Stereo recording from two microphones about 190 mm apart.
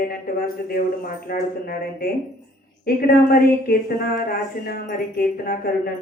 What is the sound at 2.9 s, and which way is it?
Speech, 50° left (ahead or behind).